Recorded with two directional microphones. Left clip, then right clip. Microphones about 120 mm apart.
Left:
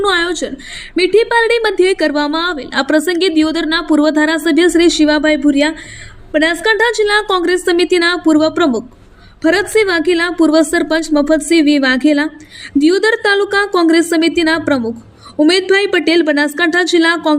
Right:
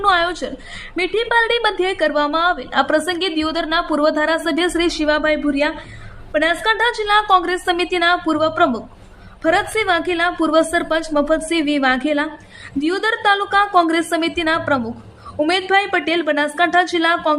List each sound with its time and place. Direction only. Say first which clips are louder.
0.0 s a woman's voice: left 2 dB; 25° left (ahead or behind)